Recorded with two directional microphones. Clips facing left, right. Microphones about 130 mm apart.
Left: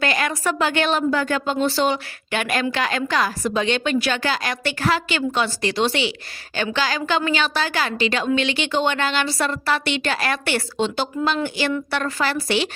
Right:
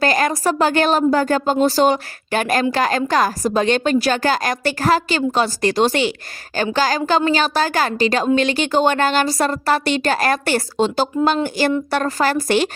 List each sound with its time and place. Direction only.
0.0 s a woman's voice: 40° right (ahead or behind)